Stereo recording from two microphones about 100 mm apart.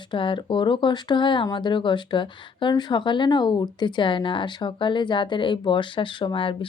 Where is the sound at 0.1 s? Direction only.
55° left (ahead or behind).